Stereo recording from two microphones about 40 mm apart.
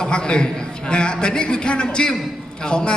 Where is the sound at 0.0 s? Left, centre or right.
Left.